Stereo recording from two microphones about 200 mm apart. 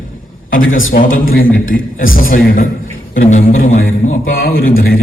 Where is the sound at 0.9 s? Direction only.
45° left (ahead or behind).